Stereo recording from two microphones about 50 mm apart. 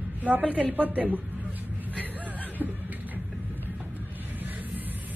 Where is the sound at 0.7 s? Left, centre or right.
Right.